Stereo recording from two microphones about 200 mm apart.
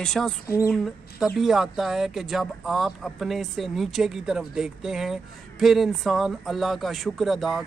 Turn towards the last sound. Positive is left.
turn(degrees=0)  # may be behind; listen again after turning